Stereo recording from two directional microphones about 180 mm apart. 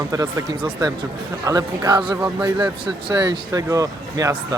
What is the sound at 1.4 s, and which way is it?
Speech, 20° right (ahead or behind).